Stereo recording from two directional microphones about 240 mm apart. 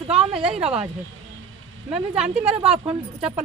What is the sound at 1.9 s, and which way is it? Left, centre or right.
Speech, centre.